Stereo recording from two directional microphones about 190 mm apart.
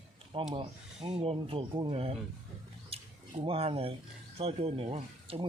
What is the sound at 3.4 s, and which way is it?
Speech, 30° right (ahead or behind).